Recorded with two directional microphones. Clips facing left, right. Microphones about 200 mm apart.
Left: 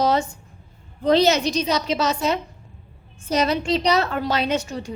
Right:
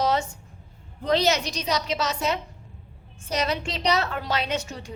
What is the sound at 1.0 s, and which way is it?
A woman's voice, 30° left (ahead or behind).